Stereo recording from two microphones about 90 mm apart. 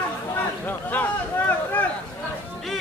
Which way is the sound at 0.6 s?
20° left (ahead or behind).